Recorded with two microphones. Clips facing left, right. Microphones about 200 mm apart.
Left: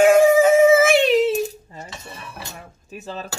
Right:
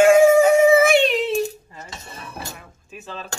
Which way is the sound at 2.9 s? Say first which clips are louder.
Left 3 dB; 40° left (ahead or behind).